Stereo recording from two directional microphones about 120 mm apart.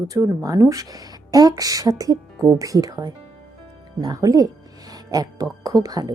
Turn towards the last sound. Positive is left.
turn(degrees=-30)  # may be behind; listen again after turning